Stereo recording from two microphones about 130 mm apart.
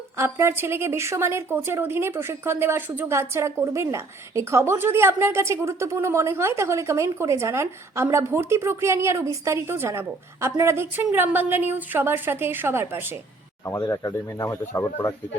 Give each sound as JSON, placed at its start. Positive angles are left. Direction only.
{"t": 0.2, "sound": "a woman's voice", "side_deg": -20}
{"t": 13.7, "sound": "speech", "side_deg": 20}